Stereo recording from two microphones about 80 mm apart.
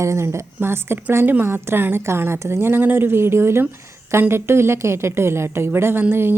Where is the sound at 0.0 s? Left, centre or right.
Right.